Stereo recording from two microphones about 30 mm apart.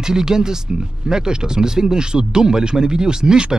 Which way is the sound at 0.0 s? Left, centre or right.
Right.